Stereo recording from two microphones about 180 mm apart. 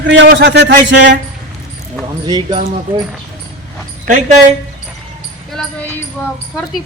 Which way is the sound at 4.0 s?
50° right (ahead or behind).